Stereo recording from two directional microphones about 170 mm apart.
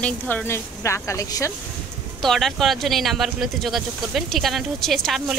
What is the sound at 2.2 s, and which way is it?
Speech, centre (ahead or behind).